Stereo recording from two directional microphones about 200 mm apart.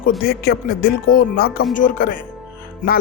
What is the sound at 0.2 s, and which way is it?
Speech, 50° left (ahead or behind).